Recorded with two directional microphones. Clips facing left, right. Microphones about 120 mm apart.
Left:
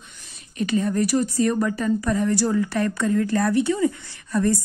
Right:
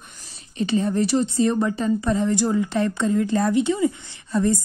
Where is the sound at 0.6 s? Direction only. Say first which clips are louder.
Right 1 dB; 30° right (ahead or behind).